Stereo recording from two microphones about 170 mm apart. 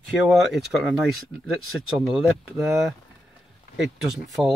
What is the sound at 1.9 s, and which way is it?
Speech, centre (ahead or behind).